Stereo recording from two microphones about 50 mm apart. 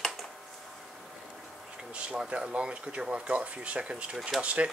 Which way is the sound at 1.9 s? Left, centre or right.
Right.